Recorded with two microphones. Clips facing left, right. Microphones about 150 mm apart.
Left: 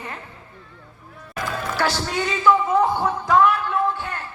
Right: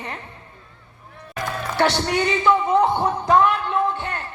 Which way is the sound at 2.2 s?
20° right (ahead or behind).